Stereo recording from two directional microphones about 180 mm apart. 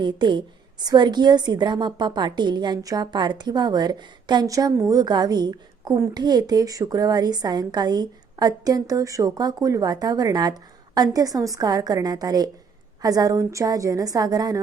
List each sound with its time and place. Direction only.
0.0 s a woman's voice: 25° right (ahead or behind)